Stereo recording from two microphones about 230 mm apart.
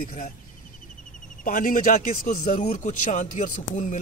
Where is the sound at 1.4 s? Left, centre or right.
Left.